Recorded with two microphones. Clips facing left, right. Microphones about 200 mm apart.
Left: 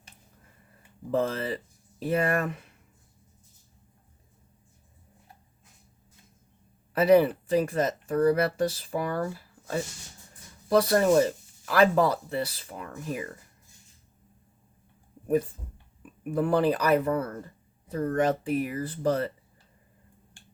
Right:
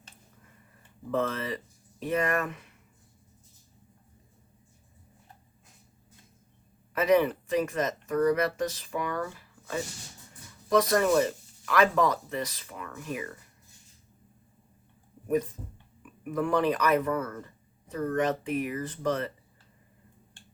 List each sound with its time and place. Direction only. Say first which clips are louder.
1.1 s speech: left 2 dB; 30° left (ahead or behind)
6.9 s speech: left 4 dB; 35° left (ahead or behind)
16.3 s speech: left 2 dB; 30° left (ahead or behind)